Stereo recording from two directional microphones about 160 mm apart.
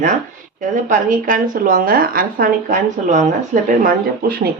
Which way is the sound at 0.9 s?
60° right (ahead or behind).